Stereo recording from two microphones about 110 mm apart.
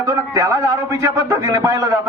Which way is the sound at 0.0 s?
30° right (ahead or behind).